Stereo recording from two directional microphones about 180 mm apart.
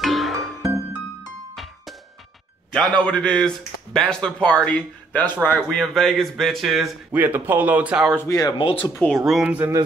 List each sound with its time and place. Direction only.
0.0 s music: centre (ahead or behind)
2.7 s speech: 5° left (ahead or behind)
8.2 s speech: 20° left (ahead or behind)
8.9 s speech: 5° left (ahead or behind)